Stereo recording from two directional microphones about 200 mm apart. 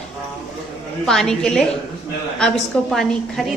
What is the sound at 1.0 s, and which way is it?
A woman's voice, centre (ahead or behind).